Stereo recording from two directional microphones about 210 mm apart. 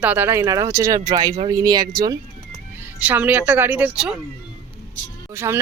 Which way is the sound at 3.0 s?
10° right (ahead or behind).